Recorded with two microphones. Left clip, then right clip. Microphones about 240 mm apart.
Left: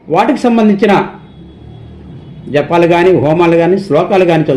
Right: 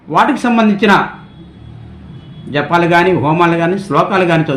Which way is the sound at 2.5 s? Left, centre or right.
Centre.